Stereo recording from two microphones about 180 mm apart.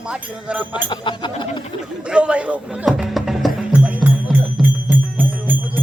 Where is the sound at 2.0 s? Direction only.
5° right (ahead or behind).